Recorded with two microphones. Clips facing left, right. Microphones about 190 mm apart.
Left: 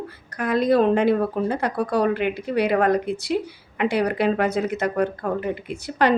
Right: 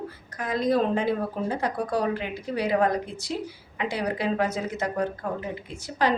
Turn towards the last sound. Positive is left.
turn(degrees=65)  # may be behind; listen again after turning